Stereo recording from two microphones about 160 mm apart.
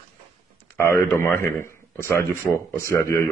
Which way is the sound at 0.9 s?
15° left (ahead or behind).